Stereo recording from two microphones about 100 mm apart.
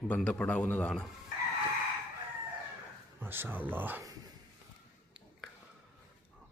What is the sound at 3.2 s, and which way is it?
Speech, 20° right (ahead or behind).